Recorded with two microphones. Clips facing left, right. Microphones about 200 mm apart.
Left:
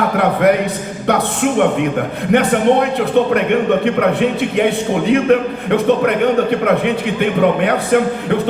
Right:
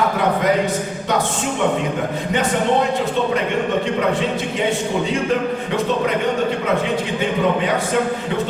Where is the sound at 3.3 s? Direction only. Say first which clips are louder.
Left 5 dB; 60° left (ahead or behind).